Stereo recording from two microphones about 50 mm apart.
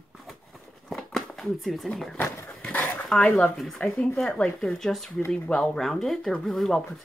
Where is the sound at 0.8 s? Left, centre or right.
Centre.